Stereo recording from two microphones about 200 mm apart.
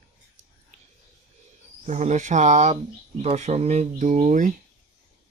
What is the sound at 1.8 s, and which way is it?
Speech, 35° right (ahead or behind).